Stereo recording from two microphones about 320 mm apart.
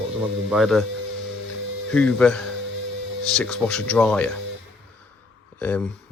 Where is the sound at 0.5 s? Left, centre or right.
Centre.